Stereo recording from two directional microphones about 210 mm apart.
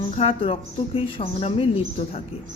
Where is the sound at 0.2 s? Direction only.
25° left (ahead or behind).